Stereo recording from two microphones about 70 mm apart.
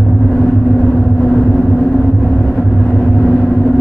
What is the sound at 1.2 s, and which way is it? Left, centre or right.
Vehicle, centre.